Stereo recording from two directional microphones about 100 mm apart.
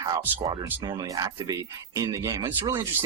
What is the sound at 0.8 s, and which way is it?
Speech, 45° right (ahead or behind).